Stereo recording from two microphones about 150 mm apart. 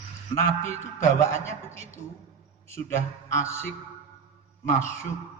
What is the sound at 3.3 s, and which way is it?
Speech, 15° left (ahead or behind).